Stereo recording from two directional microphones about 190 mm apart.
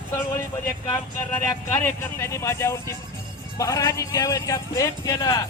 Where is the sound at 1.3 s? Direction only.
15° left (ahead or behind).